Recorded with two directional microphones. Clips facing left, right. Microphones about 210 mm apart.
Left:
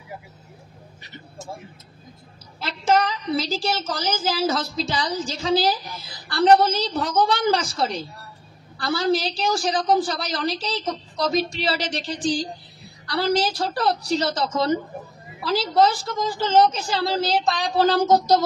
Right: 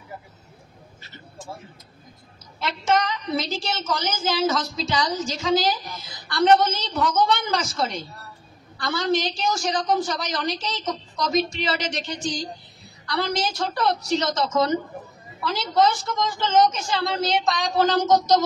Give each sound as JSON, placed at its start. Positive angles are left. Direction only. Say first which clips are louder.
{"t": 2.6, "sound": "a woman's voice", "louder": "left 2 dB", "side_deg": 30}